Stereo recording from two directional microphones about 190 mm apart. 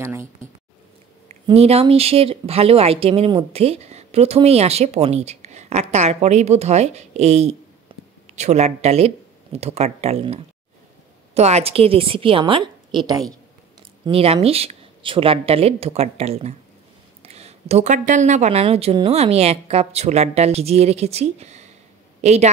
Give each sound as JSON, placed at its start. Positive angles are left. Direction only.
{"t": 0.0, "sound": "speech", "side_deg": -15}
{"t": 1.3, "sound": "a woman's voice", "side_deg": -30}